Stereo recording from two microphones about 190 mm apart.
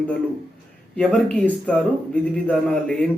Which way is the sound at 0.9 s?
5° left (ahead or behind).